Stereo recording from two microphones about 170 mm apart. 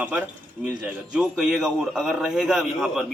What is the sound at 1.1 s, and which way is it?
A man's voice, 5° right (ahead or behind).